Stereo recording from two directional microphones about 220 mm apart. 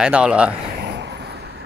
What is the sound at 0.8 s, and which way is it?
Vehicle, 50° right (ahead or behind).